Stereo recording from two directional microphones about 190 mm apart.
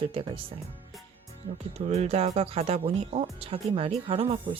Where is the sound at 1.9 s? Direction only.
35° right (ahead or behind).